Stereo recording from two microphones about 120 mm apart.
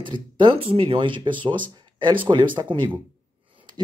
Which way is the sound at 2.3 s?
40° right (ahead or behind).